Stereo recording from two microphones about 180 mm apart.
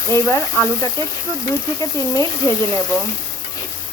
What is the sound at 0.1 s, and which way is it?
A woman's voice, 15° left (ahead or behind).